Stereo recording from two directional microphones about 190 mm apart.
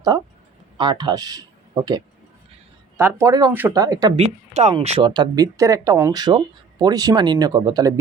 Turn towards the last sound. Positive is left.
turn(degrees=-20)  # may be behind; listen again after turning